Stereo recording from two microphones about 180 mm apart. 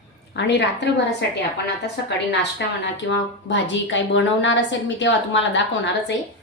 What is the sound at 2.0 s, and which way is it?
A woman's voice, 75° left (ahead or behind).